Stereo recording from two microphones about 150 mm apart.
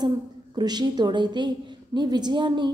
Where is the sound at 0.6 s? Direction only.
30° right (ahead or behind).